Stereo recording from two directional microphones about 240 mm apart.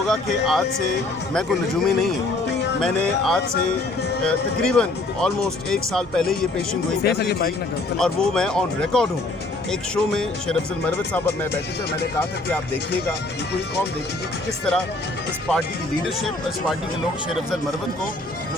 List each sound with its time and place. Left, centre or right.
0.1 s speech: centre
7.0 s speech: left
7.9 s speech: centre
16.0 s speech: centre